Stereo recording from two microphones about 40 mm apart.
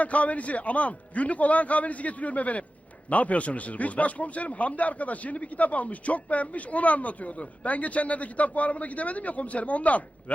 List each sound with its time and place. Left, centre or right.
0.0 s a man's voice: left